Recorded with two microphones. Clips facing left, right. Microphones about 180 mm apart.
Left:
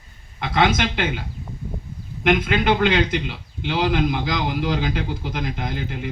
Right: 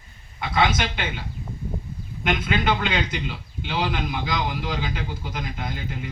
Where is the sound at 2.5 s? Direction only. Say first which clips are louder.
Left 5 dB; 65° left (ahead or behind).